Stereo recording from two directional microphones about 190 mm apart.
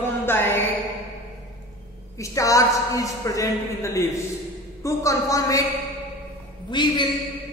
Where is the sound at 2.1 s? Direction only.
15° left (ahead or behind).